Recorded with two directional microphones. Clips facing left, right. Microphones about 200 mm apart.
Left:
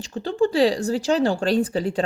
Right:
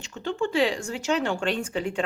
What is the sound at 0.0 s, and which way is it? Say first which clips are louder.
A woman's voice: left 6 dB; 35° left (ahead or behind).